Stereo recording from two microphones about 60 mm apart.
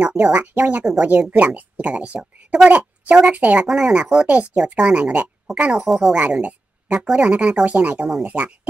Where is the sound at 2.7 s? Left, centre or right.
Right.